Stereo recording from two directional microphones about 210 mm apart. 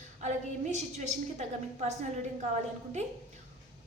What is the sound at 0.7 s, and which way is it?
A woman's voice, 35° right (ahead or behind).